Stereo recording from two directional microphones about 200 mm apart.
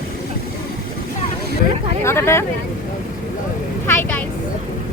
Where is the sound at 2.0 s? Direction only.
15° left (ahead or behind).